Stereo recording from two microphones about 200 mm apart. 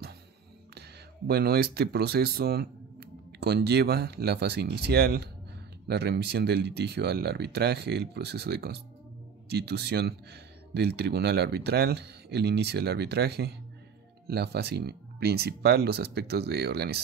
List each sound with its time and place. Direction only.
0.7 s speech: 50° right (ahead or behind)